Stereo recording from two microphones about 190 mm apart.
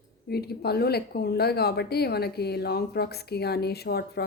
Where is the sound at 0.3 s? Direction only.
55° left (ahead or behind).